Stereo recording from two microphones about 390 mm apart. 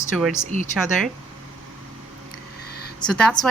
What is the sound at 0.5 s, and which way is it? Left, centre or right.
Speech, centre.